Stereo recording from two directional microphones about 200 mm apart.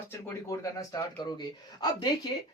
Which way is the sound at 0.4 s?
15° left (ahead or behind).